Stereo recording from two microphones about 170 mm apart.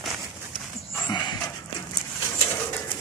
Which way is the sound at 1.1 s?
25° left (ahead or behind).